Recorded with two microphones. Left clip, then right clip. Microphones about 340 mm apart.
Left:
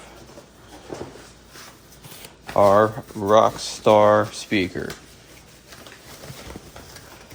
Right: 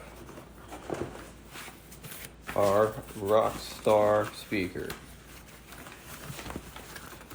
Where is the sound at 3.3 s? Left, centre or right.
Left.